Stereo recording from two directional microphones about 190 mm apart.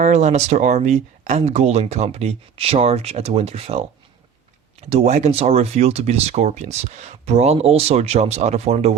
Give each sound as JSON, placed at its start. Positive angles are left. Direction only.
{"t": 0.0, "sound": "speech", "side_deg": -40}